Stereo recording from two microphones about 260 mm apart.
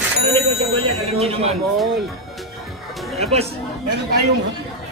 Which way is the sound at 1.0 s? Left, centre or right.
Right.